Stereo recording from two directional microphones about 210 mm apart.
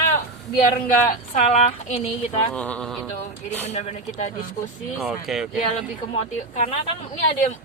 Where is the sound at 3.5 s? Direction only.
30° left (ahead or behind).